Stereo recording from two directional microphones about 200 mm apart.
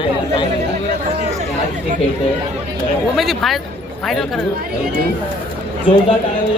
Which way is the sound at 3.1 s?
Centre (ahead or behind).